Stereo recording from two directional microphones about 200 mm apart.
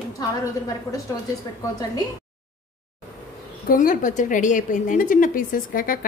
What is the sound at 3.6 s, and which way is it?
A woman's voice, 45° left (ahead or behind).